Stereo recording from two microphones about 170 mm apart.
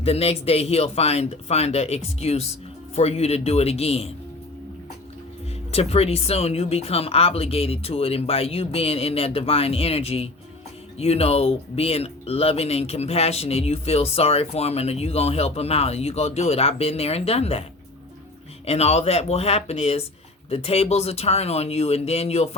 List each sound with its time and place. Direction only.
0.0 s speech: 35° left (ahead or behind)
5.7 s speech: 35° left (ahead or behind)